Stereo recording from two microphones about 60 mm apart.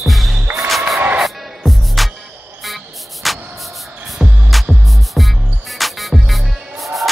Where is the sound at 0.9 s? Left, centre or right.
Right.